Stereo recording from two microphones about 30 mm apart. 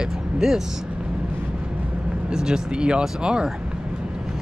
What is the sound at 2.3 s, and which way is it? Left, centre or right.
Speech, right.